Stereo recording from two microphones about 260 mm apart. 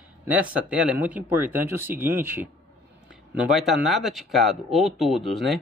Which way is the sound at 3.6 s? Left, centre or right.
Centre.